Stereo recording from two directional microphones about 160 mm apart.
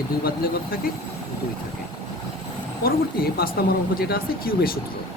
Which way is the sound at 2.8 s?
70° left (ahead or behind).